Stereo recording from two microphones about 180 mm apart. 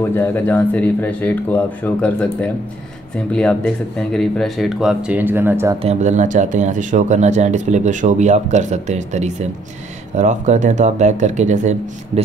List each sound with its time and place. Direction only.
0.1 s speech: 10° left (ahead or behind)
4.1 s speech: 5° left (ahead or behind); by 5.8 s 10° right (ahead or behind)
5.8 s speech: 40° right (ahead or behind)